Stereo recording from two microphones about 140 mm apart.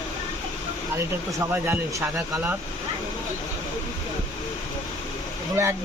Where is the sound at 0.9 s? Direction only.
20° right (ahead or behind).